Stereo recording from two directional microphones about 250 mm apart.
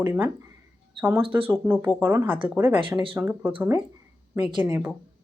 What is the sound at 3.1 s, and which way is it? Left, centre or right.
Speech, centre.